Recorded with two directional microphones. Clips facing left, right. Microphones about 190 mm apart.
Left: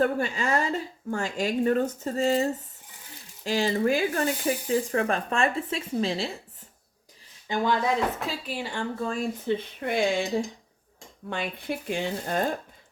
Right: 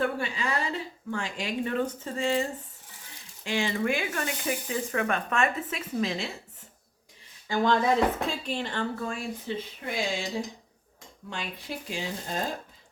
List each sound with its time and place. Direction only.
0.0 s speech: 45° left (ahead or behind)
7.8 s speech: 5° left (ahead or behind)
9.0 s speech: 35° left (ahead or behind)
9.6 s speech: 55° left (ahead or behind)
11.3 s speech: 55° left (ahead or behind)